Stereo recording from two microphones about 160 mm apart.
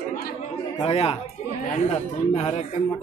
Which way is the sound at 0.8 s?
35° left (ahead or behind).